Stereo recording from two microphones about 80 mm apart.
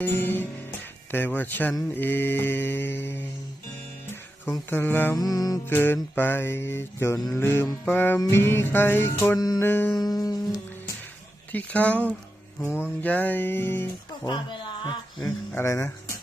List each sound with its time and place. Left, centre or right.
0.0 s music: left
4.7 s music: left
5.1 s mantra: left
5.6 s music: left
10.0 s music: left
11.5 s speech: centre
12.7 s music: left
14.3 s speech: left
15.5 s speech: left